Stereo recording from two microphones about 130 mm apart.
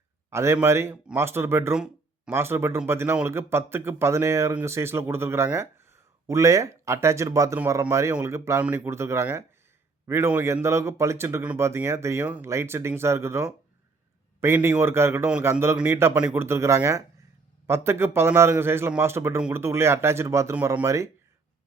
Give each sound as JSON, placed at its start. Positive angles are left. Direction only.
{"t": 0.3, "sound": "speech", "side_deg": -20}
{"t": 1.7, "sound": "a sound", "side_deg": -5}
{"t": 2.3, "sound": "speech", "side_deg": -20}